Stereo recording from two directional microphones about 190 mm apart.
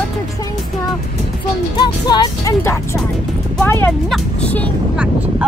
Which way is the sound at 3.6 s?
10° left (ahead or behind).